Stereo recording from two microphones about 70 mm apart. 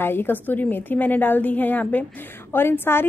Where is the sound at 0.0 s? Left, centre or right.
Left.